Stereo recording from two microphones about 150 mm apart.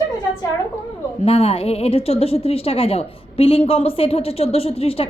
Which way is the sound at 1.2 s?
40° left (ahead or behind).